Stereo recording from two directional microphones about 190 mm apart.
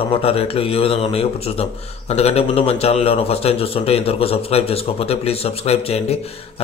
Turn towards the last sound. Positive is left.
turn(degrees=35)  # may be behind; listen again after turning